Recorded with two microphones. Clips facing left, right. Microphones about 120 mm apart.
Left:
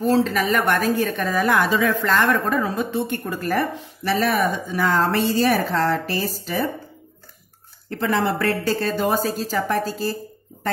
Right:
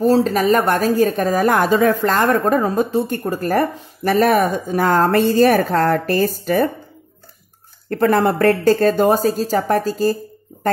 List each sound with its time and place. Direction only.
0.0 s a woman's voice: 40° right (ahead or behind)
7.9 s a woman's voice: 50° right (ahead or behind)